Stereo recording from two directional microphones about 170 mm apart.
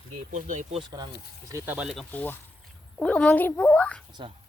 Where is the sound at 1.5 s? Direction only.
10° right (ahead or behind).